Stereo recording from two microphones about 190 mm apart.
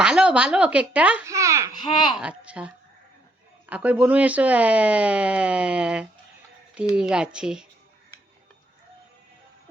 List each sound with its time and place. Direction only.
0.0 s a child's voice: 5° right (ahead or behind)
1.8 s speech: 25° left (ahead or behind)
2.1 s speech: 5° right (ahead or behind)